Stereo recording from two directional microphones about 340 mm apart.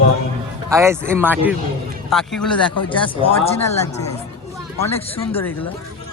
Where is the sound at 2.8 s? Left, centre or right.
Centre.